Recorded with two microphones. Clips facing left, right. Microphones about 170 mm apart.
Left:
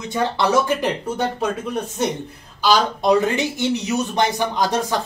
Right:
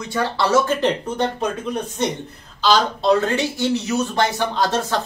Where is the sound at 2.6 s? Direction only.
10° left (ahead or behind).